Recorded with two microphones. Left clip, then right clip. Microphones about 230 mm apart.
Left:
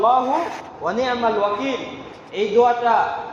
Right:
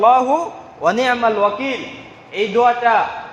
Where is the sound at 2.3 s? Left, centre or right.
Right.